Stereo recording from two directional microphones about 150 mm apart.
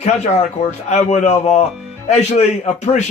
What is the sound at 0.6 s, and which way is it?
A man's voice, 45° left (ahead or behind).